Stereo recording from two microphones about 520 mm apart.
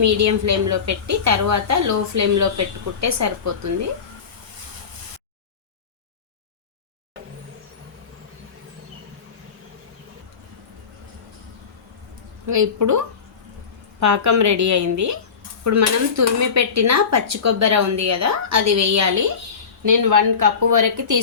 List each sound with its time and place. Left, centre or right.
0.0 s dishes: right
12.5 s dishes: right